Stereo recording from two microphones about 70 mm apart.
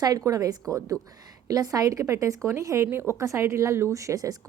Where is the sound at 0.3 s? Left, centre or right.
Right.